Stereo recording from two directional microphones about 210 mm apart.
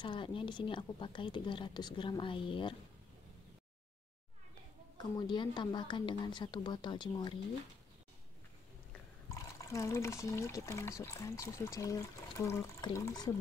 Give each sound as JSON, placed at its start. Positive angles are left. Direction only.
{"t": 0.0, "sound": "a woman's voice", "side_deg": 25}
{"t": 4.9, "sound": "a woman's voice", "side_deg": 20}
{"t": 8.9, "sound": "speech", "side_deg": 15}